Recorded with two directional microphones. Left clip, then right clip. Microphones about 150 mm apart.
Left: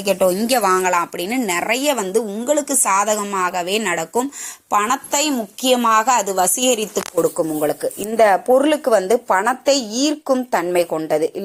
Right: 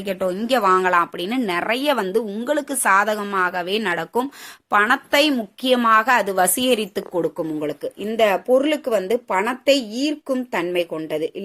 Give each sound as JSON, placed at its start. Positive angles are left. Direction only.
{"t": 0.0, "sound": "speech", "side_deg": 15}
{"t": 0.8, "sound": "a woman's voice", "side_deg": -5}
{"t": 8.1, "sound": "a woman's voice", "side_deg": -5}